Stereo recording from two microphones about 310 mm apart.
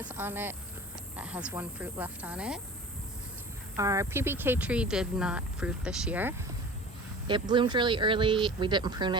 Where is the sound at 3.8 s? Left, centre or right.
Centre.